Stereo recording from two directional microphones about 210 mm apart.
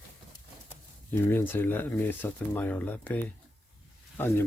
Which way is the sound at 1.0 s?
10° left (ahead or behind).